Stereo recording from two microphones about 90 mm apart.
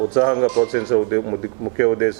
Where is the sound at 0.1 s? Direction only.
20° right (ahead or behind).